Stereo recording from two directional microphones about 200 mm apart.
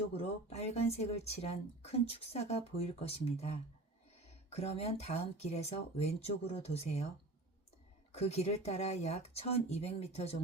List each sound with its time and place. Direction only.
0.2 s speech: 30° left (ahead or behind)
8.1 s speech: 30° left (ahead or behind)